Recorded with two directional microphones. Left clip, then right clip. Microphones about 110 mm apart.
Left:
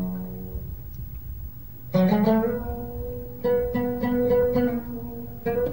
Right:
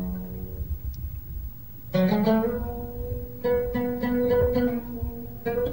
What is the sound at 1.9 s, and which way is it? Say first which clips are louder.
Music: left 1 dB; 20° right (ahead or behind).